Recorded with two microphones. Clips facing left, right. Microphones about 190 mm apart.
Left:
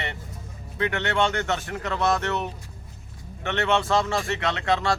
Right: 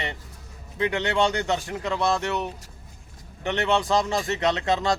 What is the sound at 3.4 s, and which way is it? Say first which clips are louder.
Speech: even; 15° right (ahead or behind).